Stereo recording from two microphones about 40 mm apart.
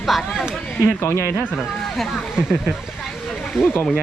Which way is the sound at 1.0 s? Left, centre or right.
Left.